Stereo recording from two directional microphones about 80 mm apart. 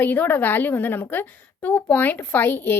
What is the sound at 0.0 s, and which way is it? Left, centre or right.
A woman's voice, left.